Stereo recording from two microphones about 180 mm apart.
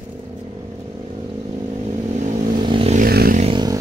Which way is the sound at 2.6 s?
25° right (ahead or behind).